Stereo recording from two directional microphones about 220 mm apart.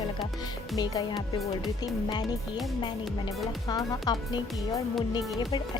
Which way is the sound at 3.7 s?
20° left (ahead or behind).